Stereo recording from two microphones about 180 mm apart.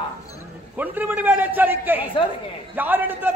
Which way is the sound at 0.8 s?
10° right (ahead or behind).